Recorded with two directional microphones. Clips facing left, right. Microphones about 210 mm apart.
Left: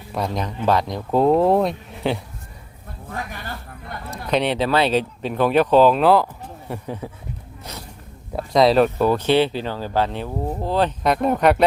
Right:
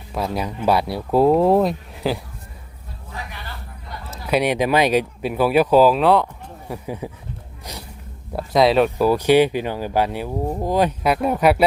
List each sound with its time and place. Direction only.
0.1 s speech: 5° right (ahead or behind)
3.1 s a sound: 50° left (ahead or behind)
4.3 s speech: 10° right (ahead or behind)
6.8 s speech: 10° right (ahead or behind)
7.7 s a sound: 15° right (ahead or behind)
8.4 s speech: centre (ahead or behind)